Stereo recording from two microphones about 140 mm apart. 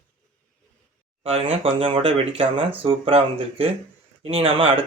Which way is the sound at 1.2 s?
45° right (ahead or behind).